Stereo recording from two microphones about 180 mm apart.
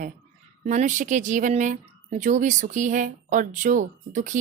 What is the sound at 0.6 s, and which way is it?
A woman's voice, 45° right (ahead or behind).